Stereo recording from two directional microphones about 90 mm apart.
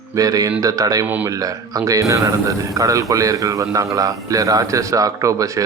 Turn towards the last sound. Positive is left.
turn(degrees=-35)  # may be behind; listen again after turning